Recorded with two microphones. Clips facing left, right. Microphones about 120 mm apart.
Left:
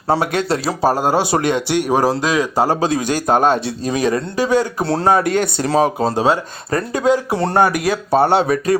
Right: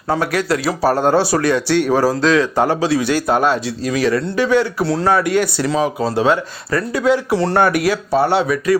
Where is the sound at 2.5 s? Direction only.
35° left (ahead or behind).